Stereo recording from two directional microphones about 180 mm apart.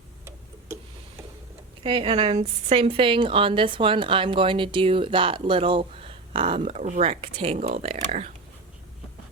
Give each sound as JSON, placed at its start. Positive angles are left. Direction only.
{"t": 1.8, "sound": "a woman's voice", "side_deg": -30}